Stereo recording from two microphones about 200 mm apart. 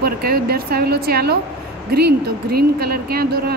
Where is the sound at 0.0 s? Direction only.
50° right (ahead or behind).